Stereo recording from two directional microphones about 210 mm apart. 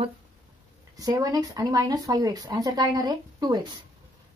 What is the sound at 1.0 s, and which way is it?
Speech, 15° right (ahead or behind).